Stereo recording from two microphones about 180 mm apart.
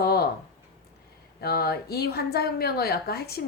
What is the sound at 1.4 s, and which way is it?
Speech, 60° left (ahead or behind).